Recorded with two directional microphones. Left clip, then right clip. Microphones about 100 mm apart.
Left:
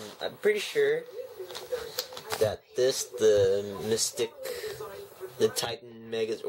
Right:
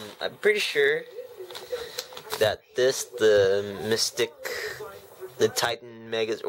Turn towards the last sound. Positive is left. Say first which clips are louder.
# right 3 dB
turn(degrees=-15)  # may be behind; listen again after turning